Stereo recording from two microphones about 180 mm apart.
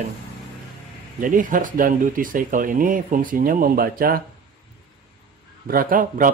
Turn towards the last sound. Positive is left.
turn(degrees=-50)  # may be behind; listen again after turning